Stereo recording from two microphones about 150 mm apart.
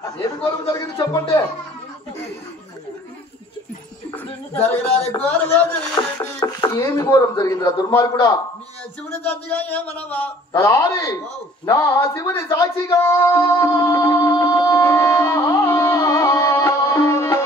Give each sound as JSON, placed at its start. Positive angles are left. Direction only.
{"t": 0.2, "sound": "speech", "side_deg": 20}
{"t": 4.1, "sound": "a man's voice", "side_deg": 10}
{"t": 6.0, "sound": "a sound", "side_deg": 30}
{"t": 6.8, "sound": "a man's voice", "side_deg": 20}
{"t": 9.2, "sound": "a man's voice", "side_deg": 10}
{"t": 13.6, "sound": "music", "side_deg": 20}